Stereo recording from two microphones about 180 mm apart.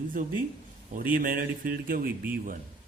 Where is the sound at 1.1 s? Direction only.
50° right (ahead or behind).